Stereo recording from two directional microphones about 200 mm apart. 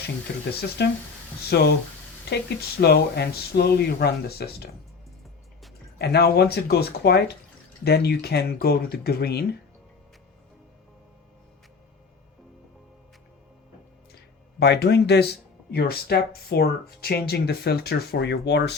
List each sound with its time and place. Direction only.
0.3 s speech: 55° left (ahead or behind)
2.8 s speech: 55° left (ahead or behind)
6.0 s speech: 50° left (ahead or behind)
14.6 s speech: 55° left (ahead or behind)